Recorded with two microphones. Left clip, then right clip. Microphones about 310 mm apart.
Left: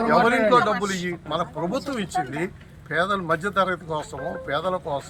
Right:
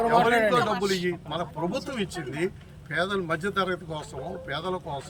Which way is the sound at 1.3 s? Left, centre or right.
Centre.